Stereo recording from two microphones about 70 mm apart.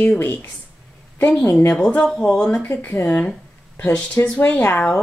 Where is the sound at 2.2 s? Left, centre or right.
Centre.